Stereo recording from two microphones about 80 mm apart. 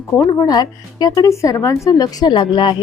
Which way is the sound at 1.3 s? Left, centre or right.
Left.